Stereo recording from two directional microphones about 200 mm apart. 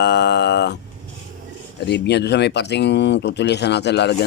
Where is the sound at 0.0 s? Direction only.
60° left (ahead or behind).